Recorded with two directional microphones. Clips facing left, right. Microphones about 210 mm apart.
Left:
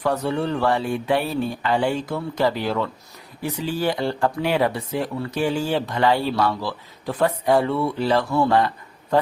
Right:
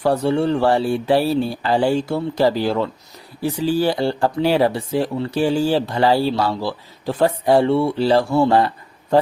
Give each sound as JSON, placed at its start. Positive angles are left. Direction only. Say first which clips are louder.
{"t": 0.0, "sound": "speech", "louder": "right 5 dB", "side_deg": -30}